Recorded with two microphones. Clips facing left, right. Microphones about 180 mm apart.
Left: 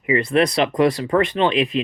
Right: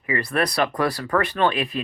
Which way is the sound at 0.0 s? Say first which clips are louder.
Left 6 dB; 25° left (ahead or behind).